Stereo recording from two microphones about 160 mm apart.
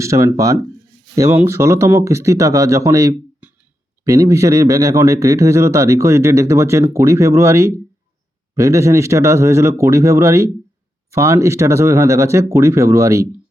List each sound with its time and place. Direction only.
0.0 s speech: 20° right (ahead or behind)